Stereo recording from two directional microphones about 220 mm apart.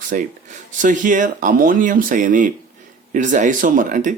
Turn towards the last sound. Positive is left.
turn(degrees=-35)  # may be behind; listen again after turning